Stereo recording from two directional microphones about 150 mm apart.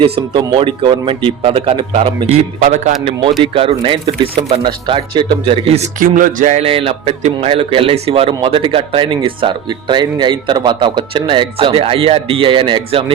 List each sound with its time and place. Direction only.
0.0 s a man's voice: 35° right (ahead or behind)
6.0 s music: 65° right (ahead or behind)
6.6 s a man's voice: 40° right (ahead or behind)